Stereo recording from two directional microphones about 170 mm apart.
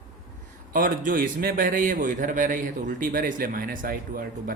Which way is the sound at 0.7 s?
55° right (ahead or behind).